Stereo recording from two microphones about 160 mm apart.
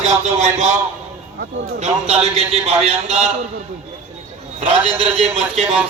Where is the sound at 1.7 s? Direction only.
40° right (ahead or behind).